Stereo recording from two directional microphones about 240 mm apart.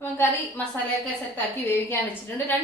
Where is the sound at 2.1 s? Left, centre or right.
Centre.